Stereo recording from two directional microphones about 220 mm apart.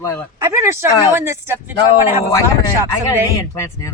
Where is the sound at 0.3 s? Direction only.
15° right (ahead or behind).